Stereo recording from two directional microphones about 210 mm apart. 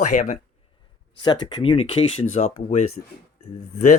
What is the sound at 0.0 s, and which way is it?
Speech, 35° left (ahead or behind).